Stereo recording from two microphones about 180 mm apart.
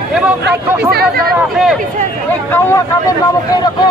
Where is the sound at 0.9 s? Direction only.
60° right (ahead or behind).